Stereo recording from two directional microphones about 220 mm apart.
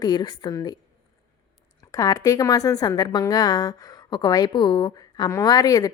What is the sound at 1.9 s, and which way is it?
A woman's voice, 15° left (ahead or behind).